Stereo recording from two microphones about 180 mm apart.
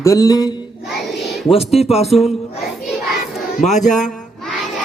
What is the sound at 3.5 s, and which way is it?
Speech, 40° left (ahead or behind).